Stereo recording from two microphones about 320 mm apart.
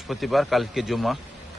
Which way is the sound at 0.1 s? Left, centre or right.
Centre.